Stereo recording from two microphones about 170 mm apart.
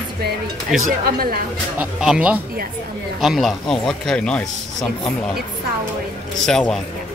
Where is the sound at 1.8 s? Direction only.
5° right (ahead or behind).